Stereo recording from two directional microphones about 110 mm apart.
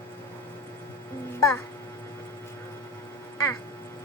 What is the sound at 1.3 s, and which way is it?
Speech, 25° left (ahead or behind).